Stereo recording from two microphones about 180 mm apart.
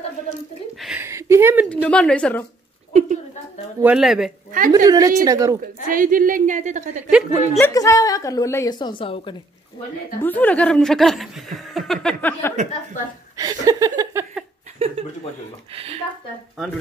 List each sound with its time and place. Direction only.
0.7 s a sound: 5° right (ahead or behind)
1.0 s a sound: 15° right (ahead or behind)
1.7 s a woman's voice: 5° left (ahead or behind)
2.9 s a sound: 40° right (ahead or behind)
3.8 s speech: 5° right (ahead or behind)
4.5 s a woman's voice: 45° right (ahead or behind)
4.7 s a woman's voice: 20° right (ahead or behind)
5.9 s a woman's voice: 50° right (ahead or behind)
7.1 s speech: 5° right (ahead or behind)
7.6 s a woman's voice: 20° left (ahead or behind)
10.2 s speech: 10° left (ahead or behind)
13.4 s speech: 20° right (ahead or behind)
15.7 s speech: 35° right (ahead or behind)